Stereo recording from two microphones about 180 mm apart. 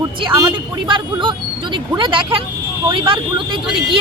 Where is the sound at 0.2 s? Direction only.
25° right (ahead or behind).